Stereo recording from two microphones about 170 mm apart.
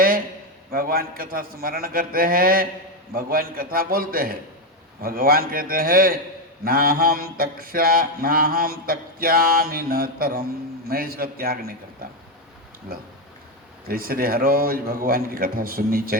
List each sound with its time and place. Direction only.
0.7 s mantra: 55° right (ahead or behind)
13.8 s mantra: 60° right (ahead or behind)